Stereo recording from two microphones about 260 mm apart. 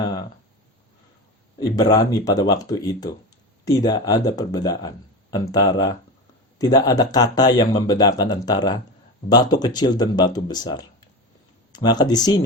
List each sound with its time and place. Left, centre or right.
1.5 s a man's voice: centre